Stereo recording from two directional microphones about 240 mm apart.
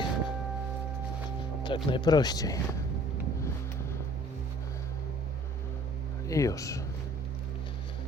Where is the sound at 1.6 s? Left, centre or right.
Centre.